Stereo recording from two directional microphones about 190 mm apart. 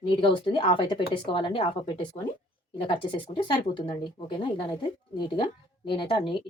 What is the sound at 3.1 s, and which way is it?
Speech, 25° left (ahead or behind).